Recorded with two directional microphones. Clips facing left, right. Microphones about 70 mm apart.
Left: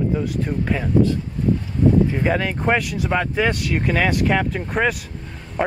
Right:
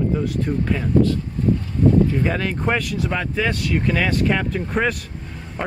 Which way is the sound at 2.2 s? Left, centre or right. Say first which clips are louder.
Left 2 dB; centre.